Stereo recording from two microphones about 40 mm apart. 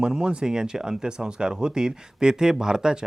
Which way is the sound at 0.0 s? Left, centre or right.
Right.